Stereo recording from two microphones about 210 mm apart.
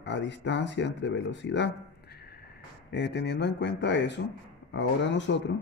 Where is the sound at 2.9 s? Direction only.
55° left (ahead or behind).